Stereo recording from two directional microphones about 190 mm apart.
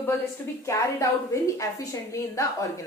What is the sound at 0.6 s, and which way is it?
A woman's voice, 15° left (ahead or behind).